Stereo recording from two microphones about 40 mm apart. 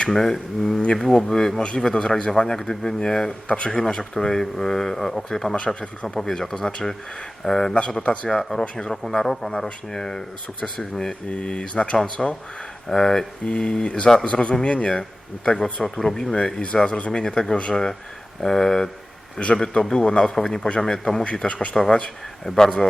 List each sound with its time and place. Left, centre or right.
0.1 s a man's voice: centre
5.5 s speech: left
6.1 s a man's voice: centre; by 8.3 s left
8.3 s a man's voice: centre
8.6 s speech: left
8.9 s a man's voice: centre
11.3 s speech: left
12.9 s a man's voice: centre
16.3 s a man's voice: left
21.2 s speech: left
22.4 s a man's voice: centre